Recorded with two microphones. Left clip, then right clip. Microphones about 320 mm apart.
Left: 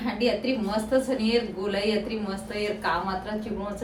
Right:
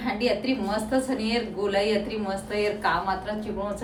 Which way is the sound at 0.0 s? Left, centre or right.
Centre.